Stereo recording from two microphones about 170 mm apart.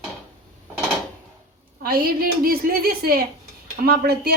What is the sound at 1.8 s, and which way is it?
Speech, 60° right (ahead or behind).